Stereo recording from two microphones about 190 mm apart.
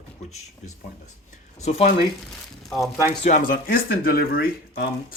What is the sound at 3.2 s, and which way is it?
Speech, 45° left (ahead or behind).